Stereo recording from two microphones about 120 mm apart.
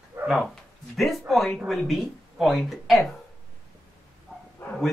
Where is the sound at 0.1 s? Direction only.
20° right (ahead or behind).